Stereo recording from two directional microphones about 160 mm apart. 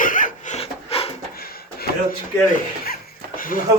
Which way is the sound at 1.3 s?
70° left (ahead or behind).